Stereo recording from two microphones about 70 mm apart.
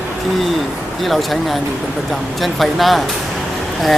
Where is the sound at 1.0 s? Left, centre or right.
Centre.